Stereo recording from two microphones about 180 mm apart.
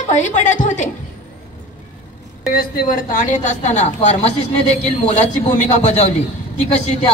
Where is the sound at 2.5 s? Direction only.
50° left (ahead or behind).